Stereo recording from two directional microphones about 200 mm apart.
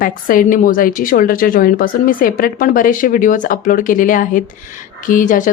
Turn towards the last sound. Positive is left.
turn(degrees=40)  # may be behind; listen again after turning